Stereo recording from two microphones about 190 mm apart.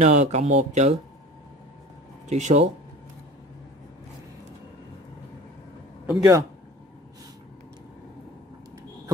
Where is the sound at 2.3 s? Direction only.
40° right (ahead or behind).